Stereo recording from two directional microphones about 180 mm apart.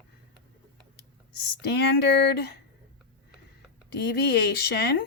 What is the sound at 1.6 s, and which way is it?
Speech, 70° left (ahead or behind).